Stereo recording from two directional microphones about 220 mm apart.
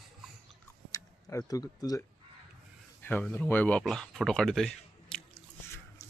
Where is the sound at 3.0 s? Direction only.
10° left (ahead or behind).